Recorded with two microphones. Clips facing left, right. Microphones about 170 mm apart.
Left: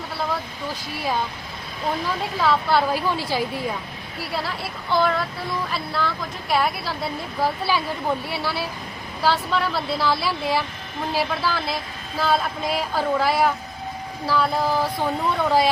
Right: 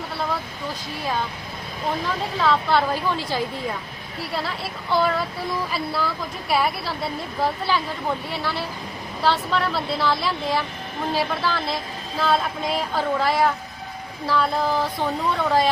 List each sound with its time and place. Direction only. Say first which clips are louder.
2.4 s a woman's voice: even; 5° left (ahead or behind)
4.4 s a woman's voice: even; 5° right (ahead or behind)